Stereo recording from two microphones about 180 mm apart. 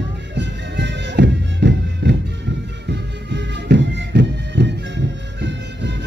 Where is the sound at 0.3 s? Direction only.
80° right.